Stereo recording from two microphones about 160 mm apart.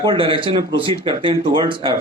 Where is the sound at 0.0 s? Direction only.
30° right (ahead or behind).